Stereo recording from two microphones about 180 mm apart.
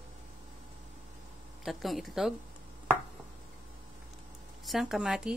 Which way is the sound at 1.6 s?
Centre (ahead or behind).